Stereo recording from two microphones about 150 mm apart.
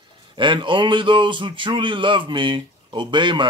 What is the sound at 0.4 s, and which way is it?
Speech, 30° right (ahead or behind).